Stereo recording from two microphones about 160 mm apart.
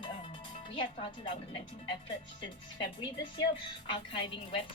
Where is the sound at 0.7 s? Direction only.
30° left (ahead or behind).